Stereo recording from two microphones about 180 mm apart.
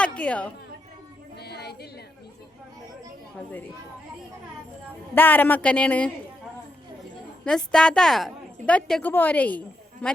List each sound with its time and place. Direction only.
0.2 s speech: 5° left (ahead or behind)
1.4 s a sound: 65° left (ahead or behind)
5.1 s speech: 10° left (ahead or behind)
7.4 s a woman's voice: 5° left (ahead or behind)